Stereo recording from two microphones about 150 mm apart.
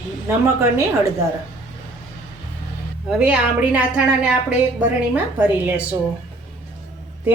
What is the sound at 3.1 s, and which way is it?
A woman's voice, 10° right (ahead or behind).